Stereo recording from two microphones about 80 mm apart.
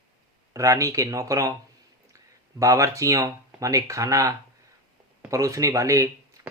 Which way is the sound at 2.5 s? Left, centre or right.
Right.